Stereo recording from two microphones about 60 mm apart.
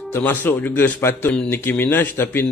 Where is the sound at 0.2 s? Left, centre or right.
Left.